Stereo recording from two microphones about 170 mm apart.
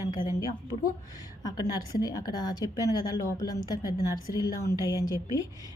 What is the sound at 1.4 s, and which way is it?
A woman's voice, 25° left (ahead or behind).